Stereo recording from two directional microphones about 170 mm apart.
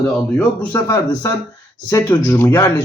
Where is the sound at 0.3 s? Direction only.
15° left (ahead or behind).